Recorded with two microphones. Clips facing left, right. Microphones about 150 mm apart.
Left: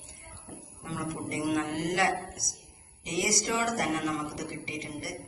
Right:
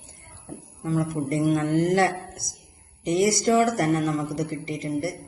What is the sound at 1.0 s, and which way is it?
Speech, 65° right (ahead or behind).